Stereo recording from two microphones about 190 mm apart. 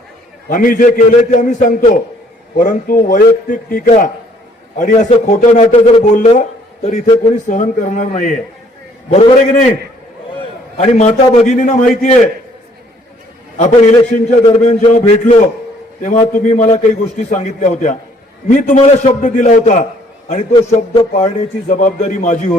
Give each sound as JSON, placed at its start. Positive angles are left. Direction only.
{"t": 0.4, "sound": "a man's voice", "side_deg": 45}
{"t": 7.4, "sound": "a man's voice", "side_deg": 40}
{"t": 10.8, "sound": "a man's voice", "side_deg": 35}
{"t": 13.6, "sound": "a man's voice", "side_deg": 40}